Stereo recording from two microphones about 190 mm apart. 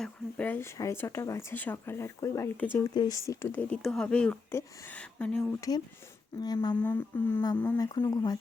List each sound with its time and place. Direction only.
0.0 s speech: 5° left (ahead or behind)
3.2 s speech: 10° left (ahead or behind)
5.5 s speech: 20° left (ahead or behind)
6.7 s speech: 10° left (ahead or behind)
7.8 s speech: 20° left (ahead or behind)